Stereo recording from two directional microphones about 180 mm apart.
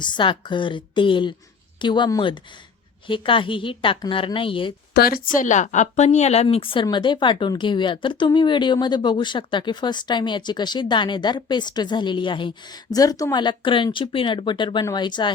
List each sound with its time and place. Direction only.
0.0 s speech: 25° left (ahead or behind)
4.9 s a woman's voice: 55° left (ahead or behind); by 15.3 s 25° left (ahead or behind)